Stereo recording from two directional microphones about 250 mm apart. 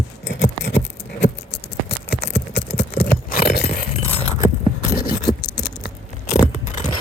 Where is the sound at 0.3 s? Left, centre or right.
Left.